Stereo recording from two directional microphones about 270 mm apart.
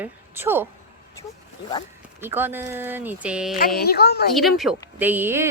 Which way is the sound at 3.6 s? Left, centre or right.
Left.